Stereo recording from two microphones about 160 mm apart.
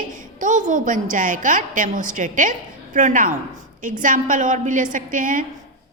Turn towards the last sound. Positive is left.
turn(degrees=-55)  # may be behind; listen again after turning